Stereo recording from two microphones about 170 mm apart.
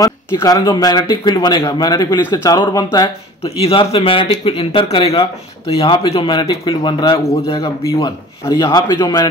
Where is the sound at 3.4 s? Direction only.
35° left (ahead or behind).